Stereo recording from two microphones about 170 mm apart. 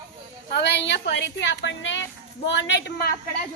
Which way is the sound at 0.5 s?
85° left.